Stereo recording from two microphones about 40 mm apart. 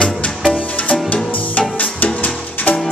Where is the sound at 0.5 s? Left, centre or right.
Left.